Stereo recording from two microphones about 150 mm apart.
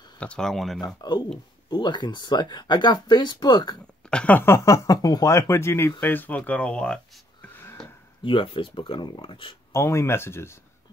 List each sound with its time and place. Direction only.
0.2 s speech: 5° left (ahead or behind)
1.0 s speech: 30° left (ahead or behind)
4.1 s speech: 10° left (ahead or behind)
7.4 s a sound: 10° left (ahead or behind)
8.2 s speech: 35° left (ahead or behind)
9.7 s speech: 20° left (ahead or behind)